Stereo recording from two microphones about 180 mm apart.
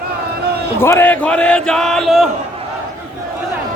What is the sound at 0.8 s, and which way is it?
Speech, 15° left (ahead or behind).